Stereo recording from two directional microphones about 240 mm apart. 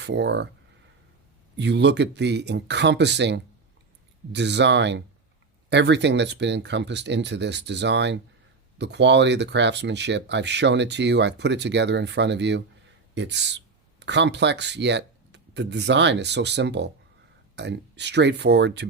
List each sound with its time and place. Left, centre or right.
0.0 s speech: right
1.5 s speech: right